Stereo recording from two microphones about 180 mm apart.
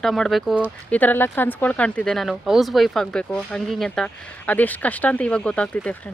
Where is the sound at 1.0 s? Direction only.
10° left (ahead or behind).